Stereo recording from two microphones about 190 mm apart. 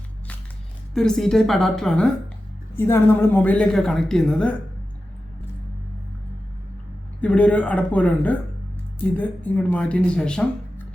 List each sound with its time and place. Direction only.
0.9 s a woman's voice: 5° left (ahead or behind)
7.2 s a woman's voice: 5° left (ahead or behind)